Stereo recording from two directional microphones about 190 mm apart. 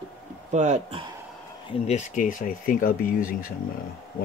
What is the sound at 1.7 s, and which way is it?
Speech, 35° left (ahead or behind).